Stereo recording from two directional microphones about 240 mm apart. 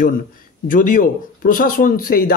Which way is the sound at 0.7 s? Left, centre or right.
Left.